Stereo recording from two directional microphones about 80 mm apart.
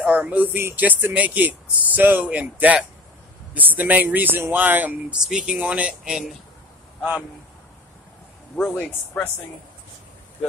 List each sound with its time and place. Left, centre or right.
0.0 s speech: centre
5.2 s speech: centre
8.7 s speech: centre